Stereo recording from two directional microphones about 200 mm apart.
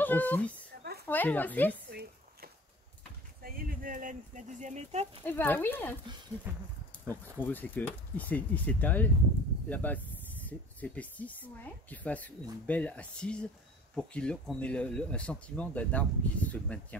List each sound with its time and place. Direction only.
0.0 s speech: 10° left (ahead or behind)
1.9 s a sound: 55° right (ahead or behind)
3.4 s speech: 45° right (ahead or behind)
5.2 s speech: 10° left (ahead or behind)
6.5 s speech: 10° right (ahead or behind)
7.3 s speech: 10° left (ahead or behind)